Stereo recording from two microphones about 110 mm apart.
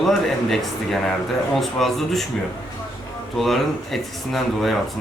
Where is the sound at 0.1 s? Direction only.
Centre (ahead or behind).